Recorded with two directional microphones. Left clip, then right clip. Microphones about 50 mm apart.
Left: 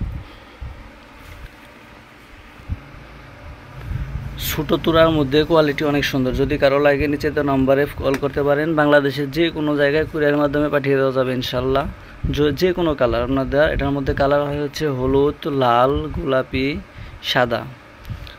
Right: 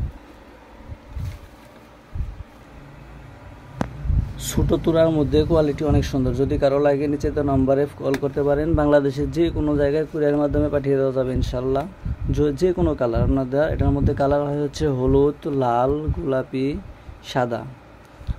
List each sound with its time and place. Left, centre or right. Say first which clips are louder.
4.4 s a sound: left 2 dB; right
4.6 s speech: left 2 dB; right
4.9 s a man's voice: left 4 dB; centre
5.3 s speech: left 3 dB; centre; by 9.1 s right
9.1 s a man's voice: left 2 dB; right
9.6 s a man's voice: left 4 dB; centre
11.5 s speech: left 3 dB; centre
11.8 s a man's voice: left 4 dB; centre
14.0 s a man's voice: left 3 dB; right
15.5 s speech: left 8 dB; centre